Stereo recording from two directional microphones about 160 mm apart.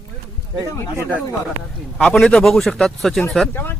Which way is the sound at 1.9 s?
5° left (ahead or behind).